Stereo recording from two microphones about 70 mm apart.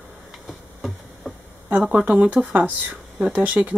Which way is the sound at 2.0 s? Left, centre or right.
Centre.